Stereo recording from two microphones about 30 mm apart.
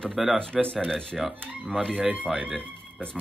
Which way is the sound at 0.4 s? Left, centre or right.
Left.